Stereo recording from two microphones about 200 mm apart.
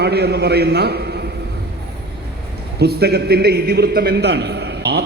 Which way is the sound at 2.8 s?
50° right (ahead or behind).